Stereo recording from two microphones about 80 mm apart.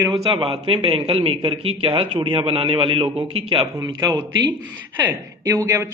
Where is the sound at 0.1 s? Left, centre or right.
Right.